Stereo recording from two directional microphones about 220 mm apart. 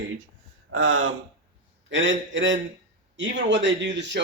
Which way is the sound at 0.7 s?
65° right (ahead or behind).